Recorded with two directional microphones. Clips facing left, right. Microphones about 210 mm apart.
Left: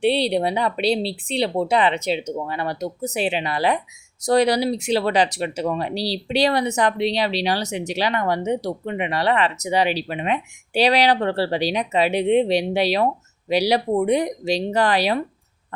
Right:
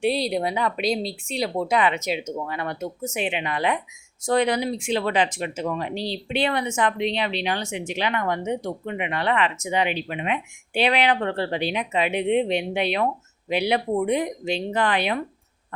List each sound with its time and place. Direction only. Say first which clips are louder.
0.0 s speech: left 4 dB; 30° left (ahead or behind)